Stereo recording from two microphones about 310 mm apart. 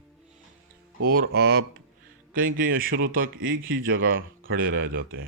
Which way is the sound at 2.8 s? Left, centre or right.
Right.